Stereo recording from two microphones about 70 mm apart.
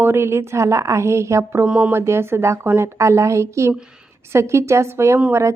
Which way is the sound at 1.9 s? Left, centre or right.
Right.